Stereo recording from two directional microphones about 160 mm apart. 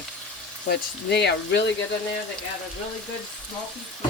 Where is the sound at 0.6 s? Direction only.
90° left.